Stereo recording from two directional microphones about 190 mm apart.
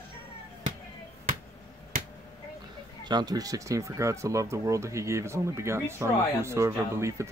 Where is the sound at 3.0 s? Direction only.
20° right (ahead or behind).